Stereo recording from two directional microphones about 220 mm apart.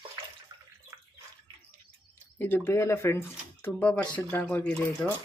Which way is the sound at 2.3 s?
10° left (ahead or behind).